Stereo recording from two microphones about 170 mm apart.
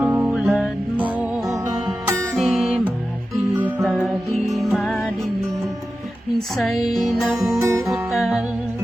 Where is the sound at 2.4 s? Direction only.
Centre (ahead or behind).